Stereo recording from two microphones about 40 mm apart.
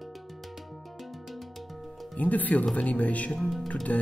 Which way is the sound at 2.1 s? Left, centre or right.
Left.